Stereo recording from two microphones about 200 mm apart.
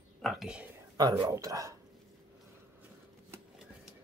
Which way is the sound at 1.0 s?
20° right (ahead or behind).